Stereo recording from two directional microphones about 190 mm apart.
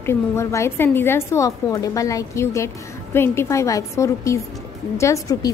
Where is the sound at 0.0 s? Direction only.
15° left (ahead or behind).